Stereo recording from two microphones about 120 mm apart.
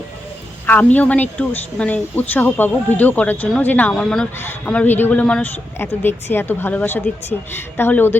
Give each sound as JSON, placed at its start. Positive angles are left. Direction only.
{"t": 0.7, "sound": "speech", "side_deg": 15}
{"t": 4.4, "sound": "speech", "side_deg": 15}